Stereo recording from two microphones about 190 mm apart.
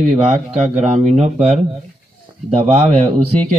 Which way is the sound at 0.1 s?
35° right (ahead or behind).